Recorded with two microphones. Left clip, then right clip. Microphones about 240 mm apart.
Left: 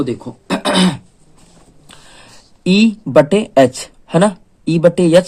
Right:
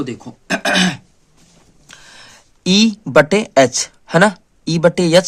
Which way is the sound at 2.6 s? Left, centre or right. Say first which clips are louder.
Even; right.